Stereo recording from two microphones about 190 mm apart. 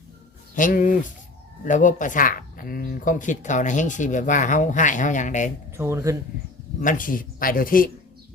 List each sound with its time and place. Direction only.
0.5 s speech: 45° left (ahead or behind)
5.7 s speech: 15° right (ahead or behind)
6.7 s speech: 45° left (ahead or behind)